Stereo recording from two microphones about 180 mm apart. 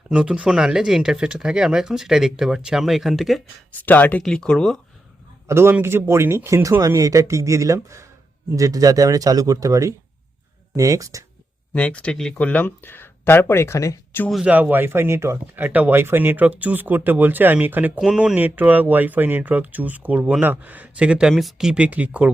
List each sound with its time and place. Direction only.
0.1 s speech: 5° right (ahead or behind)
3.8 s speech: 10° left (ahead or behind)
5.5 s speech: 15° right (ahead or behind)
11.7 s speech: 5° left (ahead or behind)
14.3 s speech: 5° right (ahead or behind)